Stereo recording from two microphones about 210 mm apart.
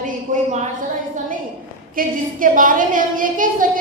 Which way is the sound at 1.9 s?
40° right (ahead or behind).